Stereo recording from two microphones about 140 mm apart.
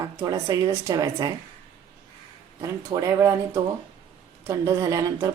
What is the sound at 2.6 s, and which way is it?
A woman's voice, 25° right (ahead or behind).